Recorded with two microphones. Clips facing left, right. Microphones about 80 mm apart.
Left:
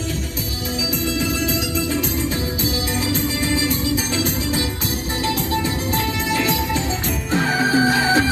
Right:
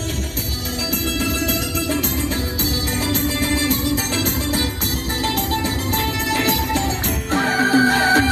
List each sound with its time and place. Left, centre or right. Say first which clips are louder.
7.3 s music: right 1 dB; right